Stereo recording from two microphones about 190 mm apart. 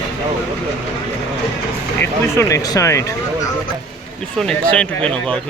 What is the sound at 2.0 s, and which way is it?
Speech, 15° left (ahead or behind).